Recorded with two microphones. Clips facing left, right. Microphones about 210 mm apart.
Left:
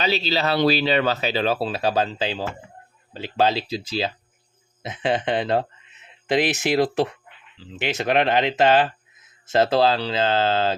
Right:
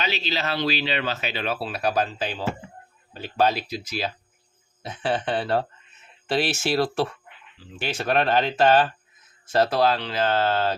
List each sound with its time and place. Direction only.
0.0 s speech: 35° left (ahead or behind)
3.1 s speech: 25° left (ahead or behind)